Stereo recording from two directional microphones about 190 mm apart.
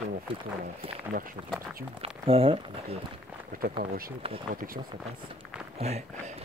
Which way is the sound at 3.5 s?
50° right (ahead or behind).